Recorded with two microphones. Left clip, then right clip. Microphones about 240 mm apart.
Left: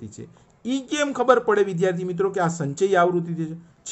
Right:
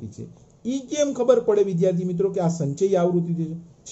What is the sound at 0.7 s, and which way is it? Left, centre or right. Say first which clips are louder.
A man's voice: right 1 dB; left.